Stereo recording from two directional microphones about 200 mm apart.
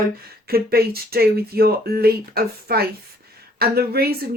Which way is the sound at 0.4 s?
50° right (ahead or behind).